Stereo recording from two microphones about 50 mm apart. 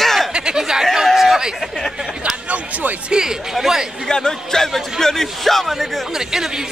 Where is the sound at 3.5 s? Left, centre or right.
Centre.